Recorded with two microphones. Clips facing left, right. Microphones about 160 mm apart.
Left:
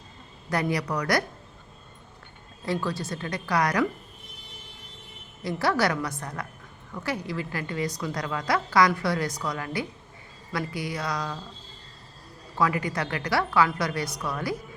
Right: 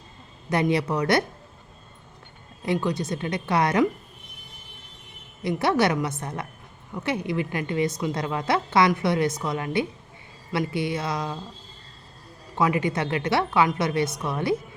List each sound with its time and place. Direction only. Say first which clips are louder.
0.5 s a woman's voice: right 4 dB; 25° right (ahead or behind)
2.6 s a woman's voice: right 4 dB; 20° right (ahead or behind)
5.4 s a woman's voice: right 3 dB; 20° right (ahead or behind)
12.5 s a woman's voice: right 3 dB; 20° right (ahead or behind)